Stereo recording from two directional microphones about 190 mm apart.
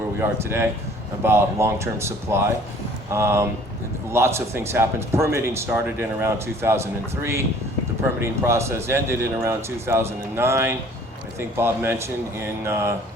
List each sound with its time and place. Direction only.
0.2 s a man's voice: 15° right (ahead or behind)